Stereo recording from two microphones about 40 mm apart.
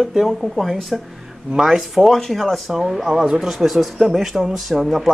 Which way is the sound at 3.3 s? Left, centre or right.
Centre.